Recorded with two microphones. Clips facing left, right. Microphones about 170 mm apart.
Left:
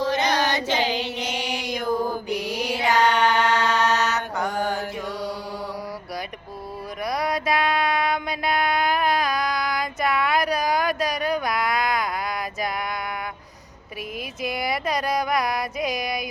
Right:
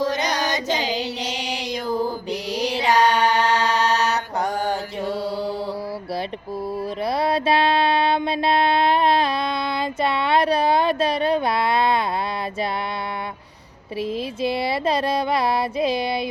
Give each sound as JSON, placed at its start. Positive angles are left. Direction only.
{"t": 0.4, "sound": "child singing", "side_deg": -45}
{"t": 2.7, "sound": "mantra", "side_deg": -30}
{"t": 7.0, "sound": "mantra", "side_deg": -30}
{"t": 14.4, "sound": "music", "side_deg": -30}